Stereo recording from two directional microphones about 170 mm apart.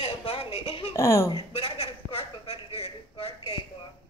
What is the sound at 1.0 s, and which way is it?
Speech, 20° left (ahead or behind).